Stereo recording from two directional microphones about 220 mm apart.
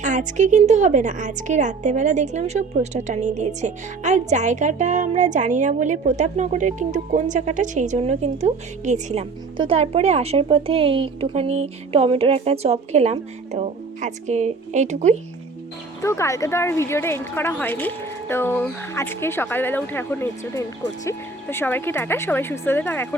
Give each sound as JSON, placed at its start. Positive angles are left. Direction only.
{"t": 0.0, "sound": "a woman's voice", "side_deg": -35}
{"t": 16.0, "sound": "speech", "side_deg": 15}